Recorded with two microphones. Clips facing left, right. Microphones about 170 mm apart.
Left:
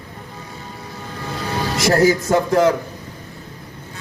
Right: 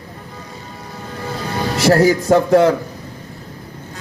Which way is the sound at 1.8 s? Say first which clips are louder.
Right 2 dB; 35° right (ahead or behind).